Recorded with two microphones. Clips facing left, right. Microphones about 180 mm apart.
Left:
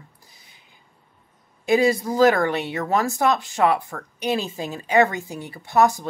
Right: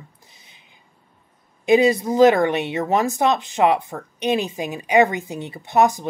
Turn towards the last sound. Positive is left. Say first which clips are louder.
# right 1 dB
turn(degrees=-20)  # may be behind; listen again after turning